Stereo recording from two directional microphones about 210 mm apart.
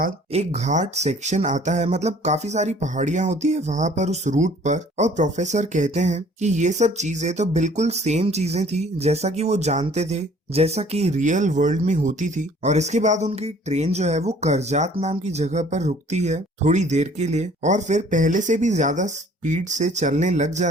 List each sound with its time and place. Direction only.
0.3 s speech: 30° right (ahead or behind)